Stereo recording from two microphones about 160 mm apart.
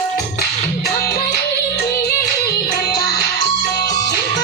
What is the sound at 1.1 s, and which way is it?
Music, 90° left.